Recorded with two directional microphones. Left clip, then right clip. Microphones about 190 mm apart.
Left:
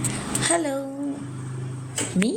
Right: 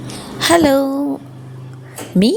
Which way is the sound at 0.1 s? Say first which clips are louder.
Right 11 dB; 50° right (ahead or behind).